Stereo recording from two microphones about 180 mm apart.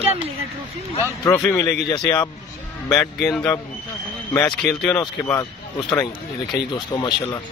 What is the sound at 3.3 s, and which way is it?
Speech, 10° left (ahead or behind).